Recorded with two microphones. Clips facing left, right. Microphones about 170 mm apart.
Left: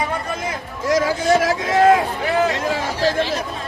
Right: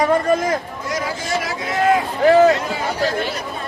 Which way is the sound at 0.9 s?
90° left.